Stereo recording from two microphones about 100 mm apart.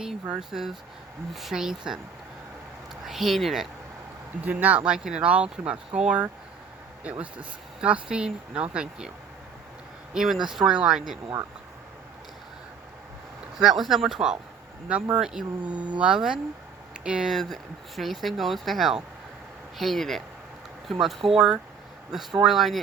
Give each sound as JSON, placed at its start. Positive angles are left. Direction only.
{"t": 0.0, "sound": "speech", "side_deg": -5}
{"t": 3.1, "sound": "speech", "side_deg": 0}
{"t": 4.4, "sound": "speech", "side_deg": -15}
{"t": 10.2, "sound": "speech", "side_deg": -5}
{"t": 13.6, "sound": "speech", "side_deg": -5}